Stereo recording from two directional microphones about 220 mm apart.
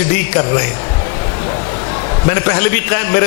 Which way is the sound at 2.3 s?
15° left (ahead or behind).